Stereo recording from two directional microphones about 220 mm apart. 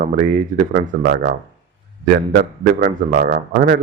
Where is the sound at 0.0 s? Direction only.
40° right (ahead or behind).